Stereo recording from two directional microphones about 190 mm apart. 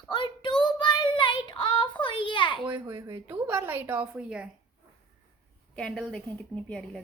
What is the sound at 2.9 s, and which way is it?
A woman's voice, 15° right (ahead or behind).